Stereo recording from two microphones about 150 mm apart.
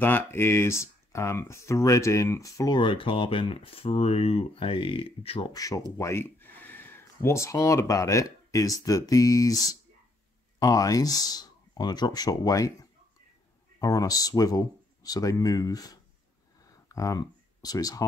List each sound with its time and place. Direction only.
0.0 s speech: 15° left (ahead or behind); by 5.5 s 40° left (ahead or behind)
5.5 s speech: 25° left (ahead or behind)
16.7 s a sound: 25° left (ahead or behind)